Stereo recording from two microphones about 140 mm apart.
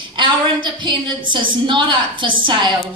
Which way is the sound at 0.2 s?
35° right (ahead or behind).